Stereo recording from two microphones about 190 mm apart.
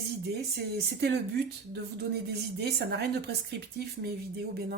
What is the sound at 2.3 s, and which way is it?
Speech, 60° right (ahead or behind).